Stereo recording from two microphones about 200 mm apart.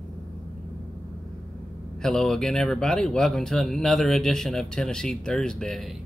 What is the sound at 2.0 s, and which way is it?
Speech, centre (ahead or behind).